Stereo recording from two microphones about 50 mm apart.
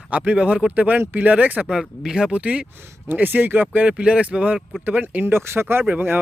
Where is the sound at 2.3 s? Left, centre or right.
Right.